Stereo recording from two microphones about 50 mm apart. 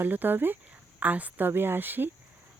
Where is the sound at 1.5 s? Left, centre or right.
Right.